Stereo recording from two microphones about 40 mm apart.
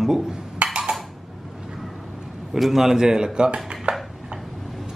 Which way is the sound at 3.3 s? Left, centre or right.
Right.